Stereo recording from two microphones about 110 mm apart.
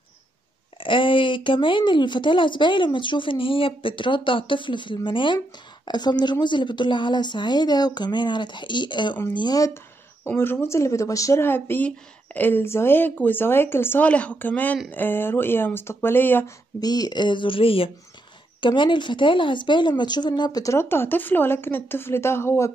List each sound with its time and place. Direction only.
0.7 s speech: 50° left (ahead or behind)
10.2 s speech: 20° left (ahead or behind)
16.8 s speech: 35° left (ahead or behind)